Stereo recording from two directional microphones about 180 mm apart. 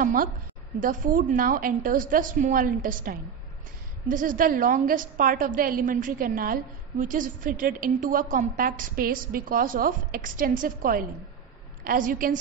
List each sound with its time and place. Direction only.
0.0 s a woman's voice: 50° right (ahead or behind)